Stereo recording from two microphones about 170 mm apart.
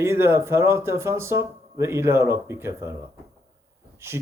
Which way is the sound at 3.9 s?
15° right (ahead or behind).